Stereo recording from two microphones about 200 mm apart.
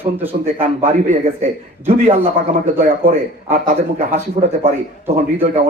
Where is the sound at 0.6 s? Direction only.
40° right (ahead or behind).